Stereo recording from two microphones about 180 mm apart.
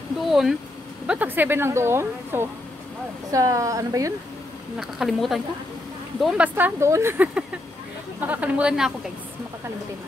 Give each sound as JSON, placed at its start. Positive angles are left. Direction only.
{"t": 0.2, "sound": "a woman's voice", "side_deg": 0}
{"t": 4.7, "sound": "a woman's voice", "side_deg": 0}